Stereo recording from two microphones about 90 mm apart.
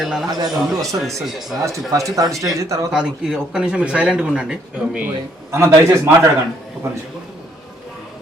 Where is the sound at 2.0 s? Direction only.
40° right (ahead or behind).